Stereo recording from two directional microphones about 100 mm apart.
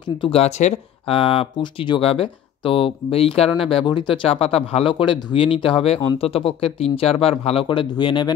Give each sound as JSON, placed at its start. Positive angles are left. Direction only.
{"t": 0.2, "sound": "speech", "side_deg": 75}
{"t": 3.8, "sound": "speech", "side_deg": 50}
{"t": 7.6, "sound": "speech", "side_deg": 55}